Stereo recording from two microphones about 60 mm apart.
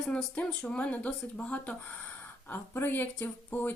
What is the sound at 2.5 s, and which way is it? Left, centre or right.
Speech, left.